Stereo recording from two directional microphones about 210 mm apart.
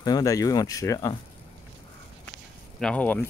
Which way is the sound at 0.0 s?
15° left (ahead or behind).